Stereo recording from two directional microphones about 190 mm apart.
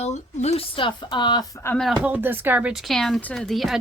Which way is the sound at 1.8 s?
5° right (ahead or behind).